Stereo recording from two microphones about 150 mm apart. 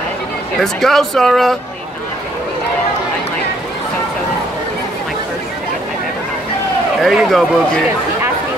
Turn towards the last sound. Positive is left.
turn(degrees=0)  # may be behind; listen again after turning